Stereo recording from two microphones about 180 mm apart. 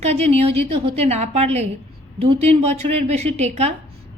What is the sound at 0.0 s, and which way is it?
A woman's voice, 35° right (ahead or behind).